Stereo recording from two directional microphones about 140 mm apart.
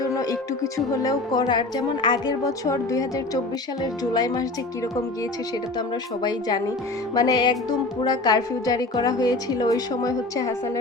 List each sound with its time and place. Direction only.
0.0 s speech: 25° left (ahead or behind)
4.1 s speech: 25° left (ahead or behind)
7.1 s speech: 30° left (ahead or behind)